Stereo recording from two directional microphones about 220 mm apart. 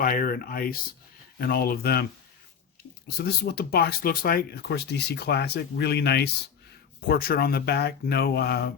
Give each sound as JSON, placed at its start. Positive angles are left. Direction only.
{"t": 0.0, "sound": "speech", "side_deg": 40}
{"t": 3.2, "sound": "speech", "side_deg": 45}